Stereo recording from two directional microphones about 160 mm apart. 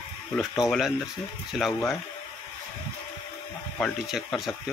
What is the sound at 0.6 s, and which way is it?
Speech, centre (ahead or behind).